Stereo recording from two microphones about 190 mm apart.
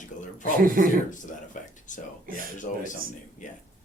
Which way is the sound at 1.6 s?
45° left (ahead or behind).